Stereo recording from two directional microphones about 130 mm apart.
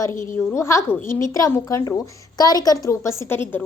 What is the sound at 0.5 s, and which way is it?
A woman's voice, 20° left (ahead or behind).